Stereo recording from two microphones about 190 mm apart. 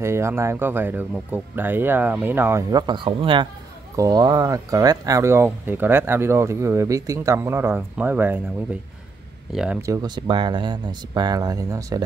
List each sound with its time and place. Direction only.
0.0 s speech: 15° right (ahead or behind)
9.5 s speech: centre (ahead or behind)
9.8 s speech: 20° right (ahead or behind)